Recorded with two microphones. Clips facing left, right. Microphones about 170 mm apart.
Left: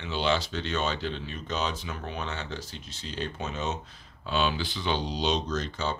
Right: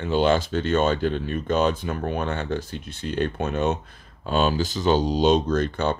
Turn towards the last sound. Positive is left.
turn(degrees=-60)  # may be behind; listen again after turning